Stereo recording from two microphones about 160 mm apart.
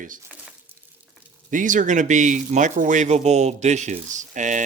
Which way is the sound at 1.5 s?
55° right (ahead or behind).